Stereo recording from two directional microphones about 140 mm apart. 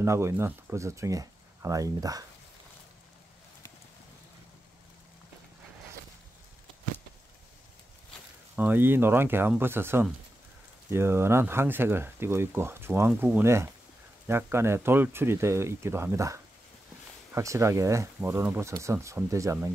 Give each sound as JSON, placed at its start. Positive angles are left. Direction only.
{"t": 0.0, "sound": "speech", "side_deg": -20}
{"t": 8.5, "sound": "speech", "side_deg": -15}